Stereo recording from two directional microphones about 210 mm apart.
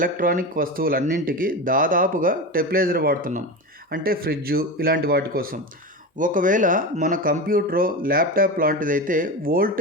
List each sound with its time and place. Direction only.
0.0 s speech: 40° right (ahead or behind)